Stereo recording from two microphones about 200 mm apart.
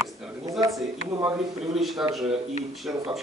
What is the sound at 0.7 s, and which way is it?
Speech, 5° right (ahead or behind).